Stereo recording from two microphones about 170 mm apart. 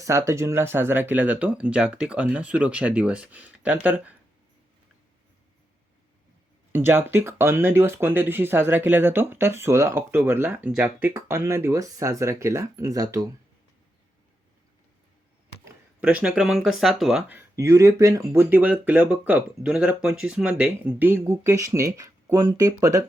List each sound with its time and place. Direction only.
0.0 s speech: 20° right (ahead or behind)
6.7 s speech: 15° right (ahead or behind)
16.0 s speech: 5° right (ahead or behind)